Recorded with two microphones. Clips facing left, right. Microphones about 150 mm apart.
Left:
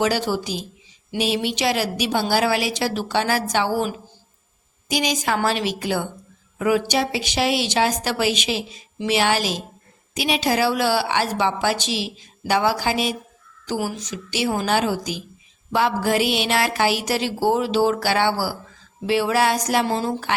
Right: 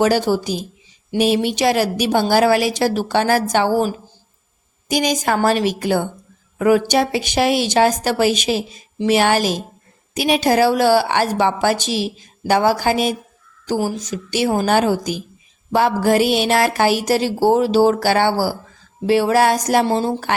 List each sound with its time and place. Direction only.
0.0 s a woman's voice: 45° right (ahead or behind)
4.9 s a woman's voice: 50° right (ahead or behind)
19.9 s a woman's voice: 30° right (ahead or behind)